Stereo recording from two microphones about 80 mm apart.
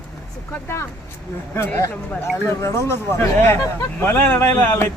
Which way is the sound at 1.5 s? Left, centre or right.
Left.